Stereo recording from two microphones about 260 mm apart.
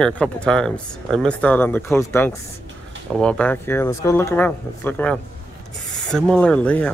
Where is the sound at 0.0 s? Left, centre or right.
Centre.